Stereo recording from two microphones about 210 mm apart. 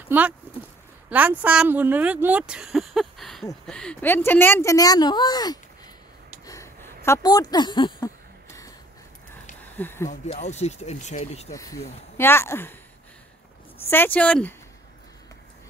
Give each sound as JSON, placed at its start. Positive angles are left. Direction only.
{"t": 1.1, "sound": "speech", "side_deg": -5}
{"t": 6.4, "sound": "a sound", "side_deg": 15}
{"t": 9.6, "sound": "a sound", "side_deg": 10}
{"t": 10.0, "sound": "speech", "side_deg": 35}
{"t": 11.5, "sound": "speech", "side_deg": 15}
{"t": 13.8, "sound": "speech", "side_deg": 10}